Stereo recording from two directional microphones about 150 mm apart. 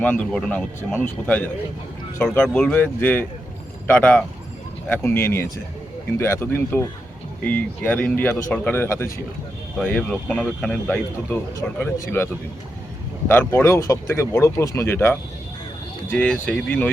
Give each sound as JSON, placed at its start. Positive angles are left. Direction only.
{"t": 0.0, "sound": "speech", "side_deg": 10}
{"t": 11.5, "sound": "speech", "side_deg": 20}